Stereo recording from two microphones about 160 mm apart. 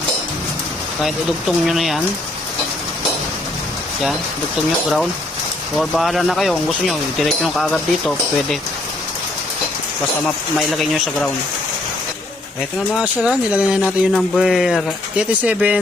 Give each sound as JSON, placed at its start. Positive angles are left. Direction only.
{"t": 1.0, "sound": "speech", "side_deg": 0}
{"t": 5.7, "sound": "speech", "side_deg": 0}
{"t": 10.7, "sound": "speech", "side_deg": 0}
{"t": 13.2, "sound": "speech", "side_deg": -5}